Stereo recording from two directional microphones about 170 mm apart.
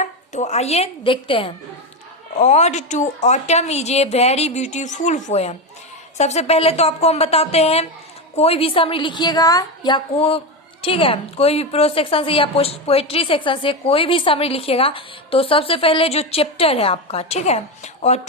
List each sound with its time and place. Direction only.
0.0 s speech: 40° left (ahead or behind)
2.4 s a woman's voice: 40° left (ahead or behind)